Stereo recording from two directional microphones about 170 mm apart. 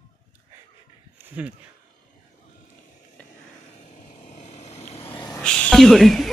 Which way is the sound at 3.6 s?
40° left (ahead or behind).